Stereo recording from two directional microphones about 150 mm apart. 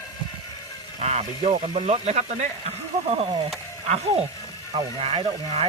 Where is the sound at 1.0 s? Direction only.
45° right (ahead or behind).